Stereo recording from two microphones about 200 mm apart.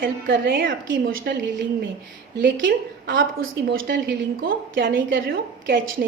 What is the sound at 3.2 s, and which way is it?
A woman's voice, 75° right (ahead or behind).